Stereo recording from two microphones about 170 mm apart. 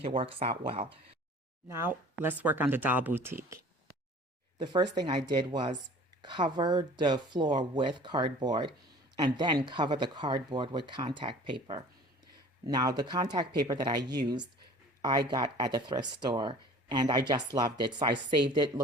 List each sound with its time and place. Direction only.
0.0 s speech: 30° right (ahead or behind)
1.6 s speech: 15° right (ahead or behind)
4.6 s speech: 25° right (ahead or behind)